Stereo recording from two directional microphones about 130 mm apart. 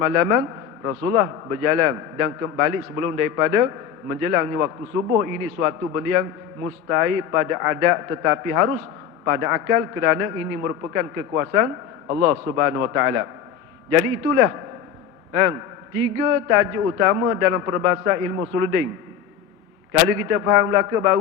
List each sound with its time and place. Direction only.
0.0 s a man's voice: 20° right (ahead or behind)
15.3 s a man's voice: 25° right (ahead or behind)
19.9 s a man's voice: 20° right (ahead or behind)